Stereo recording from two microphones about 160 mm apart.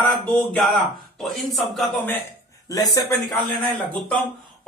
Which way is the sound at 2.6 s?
20° left (ahead or behind).